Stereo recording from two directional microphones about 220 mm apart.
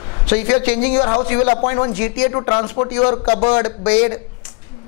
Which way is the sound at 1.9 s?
55° left (ahead or behind).